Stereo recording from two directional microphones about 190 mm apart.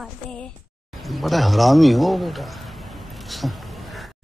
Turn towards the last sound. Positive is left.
turn(degrees=0)  # may be behind; listen again after turning